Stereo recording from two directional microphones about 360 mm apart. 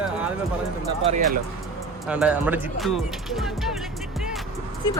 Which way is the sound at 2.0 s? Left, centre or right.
Centre.